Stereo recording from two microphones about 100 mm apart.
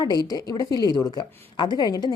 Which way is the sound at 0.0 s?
40° left (ahead or behind).